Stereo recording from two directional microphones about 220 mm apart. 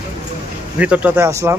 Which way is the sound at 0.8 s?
5° right (ahead or behind).